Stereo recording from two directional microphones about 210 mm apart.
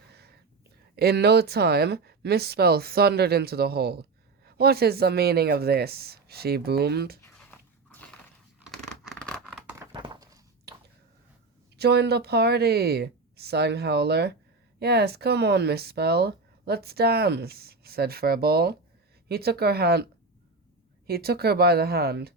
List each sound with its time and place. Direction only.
0.1 s whispering: 50° right (ahead or behind)
0.9 s speech: 50° right (ahead or behind)
8.5 s a sound: centre (ahead or behind)
9.7 s a sound: 20° right (ahead or behind)
11.8 s speech: 50° right (ahead or behind)
21.1 s speech: 45° right (ahead or behind)